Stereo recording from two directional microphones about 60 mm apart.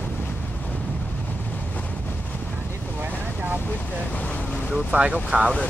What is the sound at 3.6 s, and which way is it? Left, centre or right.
Vehicle, left.